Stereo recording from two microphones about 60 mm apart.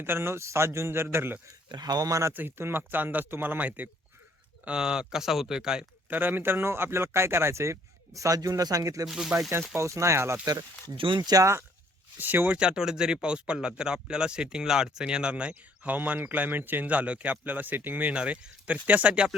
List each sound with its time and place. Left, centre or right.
0.0 s speech: right
1.0 s speech: right
1.8 s speech: right
2.3 s speech: right
4.6 s speech: centre
6.1 s speech: right
9.0 s speech: centre
9.7 s speech: right
11.2 s speech: right
12.1 s speech: right
12.5 s speech: centre
16.0 s speech: right
18.1 s speech: centre